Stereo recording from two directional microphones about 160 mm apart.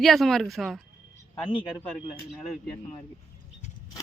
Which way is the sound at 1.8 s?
Centre (ahead or behind).